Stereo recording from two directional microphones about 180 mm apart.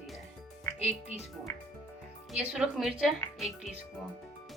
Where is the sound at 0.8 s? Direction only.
35° left (ahead or behind).